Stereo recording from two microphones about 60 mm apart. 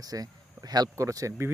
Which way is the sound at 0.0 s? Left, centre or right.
Right.